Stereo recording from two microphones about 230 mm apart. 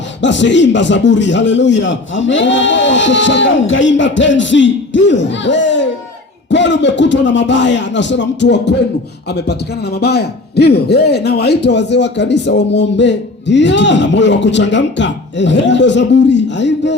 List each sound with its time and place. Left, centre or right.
0.2 s a man's voice: left
10.0 s a man's voice: left